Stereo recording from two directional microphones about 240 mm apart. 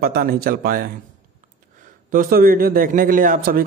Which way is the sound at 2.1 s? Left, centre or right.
Right.